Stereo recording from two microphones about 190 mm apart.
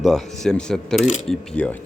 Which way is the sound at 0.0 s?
Centre (ahead or behind).